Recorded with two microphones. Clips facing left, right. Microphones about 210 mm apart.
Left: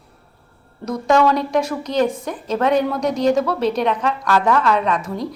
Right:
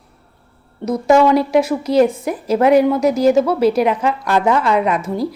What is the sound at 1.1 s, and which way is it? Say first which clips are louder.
Speech: right 4 dB; 25° right (ahead or behind).